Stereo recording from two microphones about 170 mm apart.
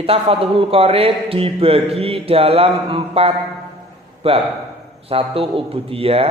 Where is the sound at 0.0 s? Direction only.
35° right (ahead or behind).